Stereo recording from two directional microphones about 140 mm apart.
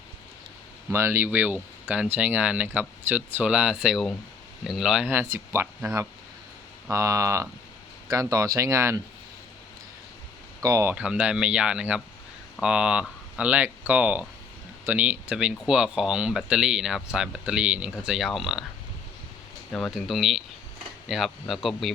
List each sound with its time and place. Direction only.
0.9 s speech: 20° right (ahead or behind)
6.9 s speech: 20° right (ahead or behind)
10.6 s speech: 20° right (ahead or behind); by 18.6 s centre (ahead or behind)
19.7 s speech: centre (ahead or behind)